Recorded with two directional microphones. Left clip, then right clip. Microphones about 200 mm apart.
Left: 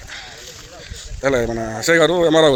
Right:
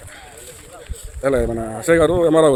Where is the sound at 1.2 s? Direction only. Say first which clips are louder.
Even; centre (ahead or behind).